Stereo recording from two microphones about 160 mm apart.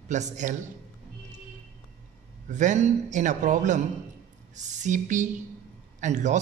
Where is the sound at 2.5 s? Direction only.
50° right (ahead or behind).